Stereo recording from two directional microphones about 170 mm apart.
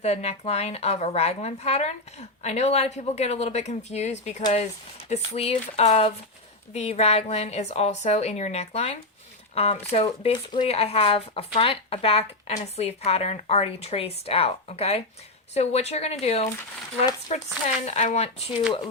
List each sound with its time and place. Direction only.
0.0 s a woman's voice: 40° left (ahead or behind)